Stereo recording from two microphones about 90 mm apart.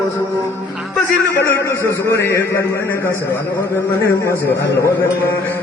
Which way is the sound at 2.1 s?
25° left (ahead or behind).